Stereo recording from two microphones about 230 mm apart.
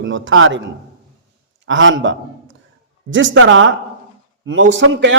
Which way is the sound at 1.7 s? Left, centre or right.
Right.